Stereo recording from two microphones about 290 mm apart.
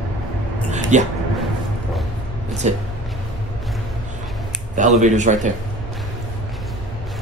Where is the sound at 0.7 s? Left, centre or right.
Right.